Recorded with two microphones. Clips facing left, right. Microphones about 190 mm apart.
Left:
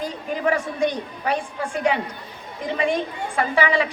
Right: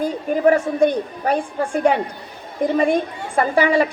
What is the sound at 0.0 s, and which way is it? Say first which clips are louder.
A woman's voice: right 7 dB; 45° right (ahead or behind).